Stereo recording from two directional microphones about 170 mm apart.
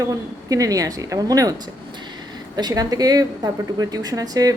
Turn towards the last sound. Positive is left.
turn(degrees=-20)  # may be behind; listen again after turning